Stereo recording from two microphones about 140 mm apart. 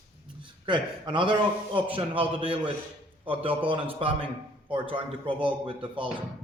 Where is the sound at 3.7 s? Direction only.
40° right (ahead or behind).